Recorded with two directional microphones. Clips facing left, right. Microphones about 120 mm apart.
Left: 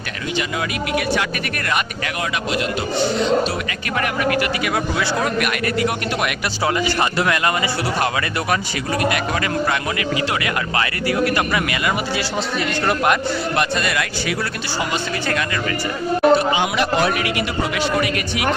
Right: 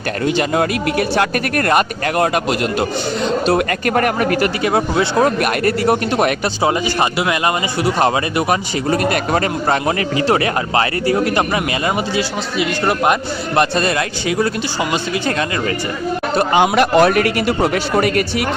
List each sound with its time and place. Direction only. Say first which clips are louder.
0.3 s a man's voice: right 4 dB; 45° right (ahead or behind)
6.6 s a man's voice: right 1 dB; 20° right (ahead or behind)
8.9 s a man's voice: right 4 dB; 40° right (ahead or behind); by 13.1 s 20° right (ahead or behind)
13.6 s a man's voice: right 8 dB; 30° right (ahead or behind)
16.5 s a man's voice: right 6 dB; 55° right (ahead or behind)